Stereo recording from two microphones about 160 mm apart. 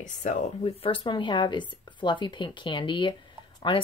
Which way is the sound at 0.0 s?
50° left (ahead or behind).